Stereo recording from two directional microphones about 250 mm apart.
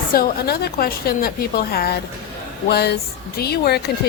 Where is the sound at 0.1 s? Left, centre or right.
Left.